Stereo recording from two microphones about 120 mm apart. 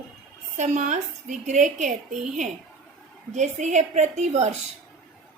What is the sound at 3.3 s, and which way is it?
A woman's voice, 85° right.